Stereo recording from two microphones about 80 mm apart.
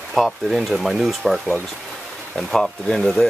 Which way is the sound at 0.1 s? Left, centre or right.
Centre.